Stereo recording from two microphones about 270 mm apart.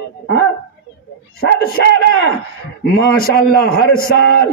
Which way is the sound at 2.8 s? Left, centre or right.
Left.